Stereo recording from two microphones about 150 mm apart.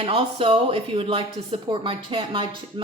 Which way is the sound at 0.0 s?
40° right (ahead or behind).